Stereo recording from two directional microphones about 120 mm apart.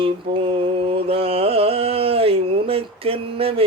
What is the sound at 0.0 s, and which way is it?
Mantra, 45° right (ahead or behind).